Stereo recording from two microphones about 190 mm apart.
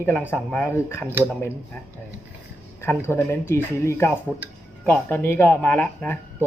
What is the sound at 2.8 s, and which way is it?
Speech, 15° left (ahead or behind).